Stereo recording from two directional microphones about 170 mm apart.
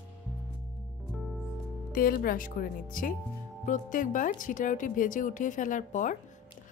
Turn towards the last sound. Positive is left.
turn(degrees=50)  # may be behind; listen again after turning